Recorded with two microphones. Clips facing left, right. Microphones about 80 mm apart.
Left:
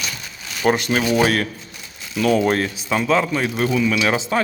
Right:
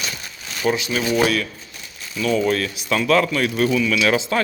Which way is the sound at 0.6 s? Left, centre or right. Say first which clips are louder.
Left 3 dB; left.